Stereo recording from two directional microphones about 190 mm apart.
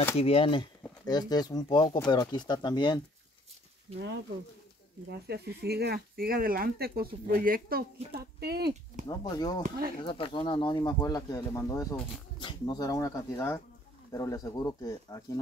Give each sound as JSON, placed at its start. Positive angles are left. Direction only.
{"t": 0.2, "sound": "speech", "side_deg": 30}
{"t": 5.2, "sound": "speech", "side_deg": -60}
{"t": 9.0, "sound": "speech", "side_deg": 20}